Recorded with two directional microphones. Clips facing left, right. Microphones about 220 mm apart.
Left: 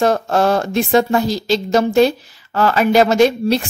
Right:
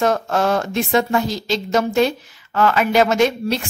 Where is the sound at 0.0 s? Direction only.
35° left (ahead or behind).